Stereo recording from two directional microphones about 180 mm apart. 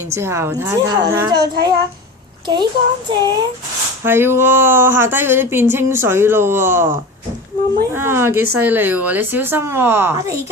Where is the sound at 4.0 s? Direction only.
15° right (ahead or behind).